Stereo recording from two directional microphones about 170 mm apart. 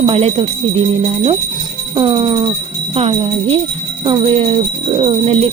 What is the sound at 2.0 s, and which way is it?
Speech, 30° right (ahead or behind).